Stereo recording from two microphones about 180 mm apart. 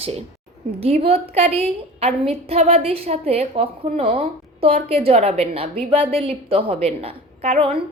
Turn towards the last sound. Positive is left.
turn(degrees=-30)  # may be behind; listen again after turning